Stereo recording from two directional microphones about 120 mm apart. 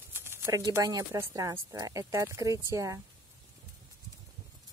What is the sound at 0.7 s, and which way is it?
Speech, 25° right (ahead or behind).